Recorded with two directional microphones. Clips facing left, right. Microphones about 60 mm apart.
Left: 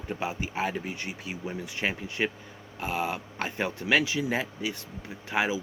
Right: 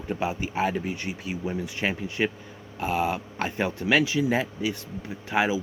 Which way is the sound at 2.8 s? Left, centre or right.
Centre.